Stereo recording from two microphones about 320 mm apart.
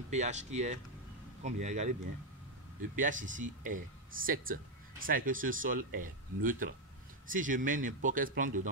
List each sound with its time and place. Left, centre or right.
0.1 s speech: right
3.0 s speech: right